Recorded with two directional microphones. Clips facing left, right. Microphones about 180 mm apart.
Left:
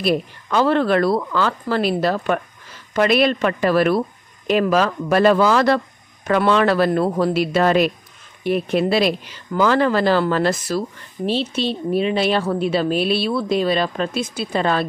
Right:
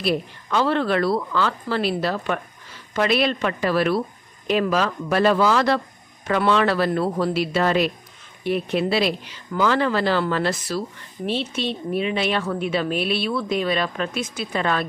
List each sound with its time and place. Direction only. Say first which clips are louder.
0.0 s speech: left 3 dB; 50° left (ahead or behind)